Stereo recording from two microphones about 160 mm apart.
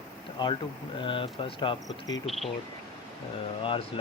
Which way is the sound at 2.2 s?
Centre (ahead or behind).